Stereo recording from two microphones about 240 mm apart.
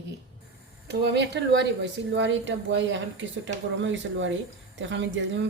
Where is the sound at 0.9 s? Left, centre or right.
Right.